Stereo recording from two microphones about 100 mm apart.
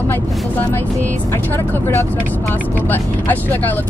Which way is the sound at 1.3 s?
20° left (ahead or behind).